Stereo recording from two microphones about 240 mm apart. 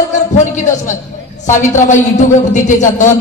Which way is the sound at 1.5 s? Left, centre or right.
Left.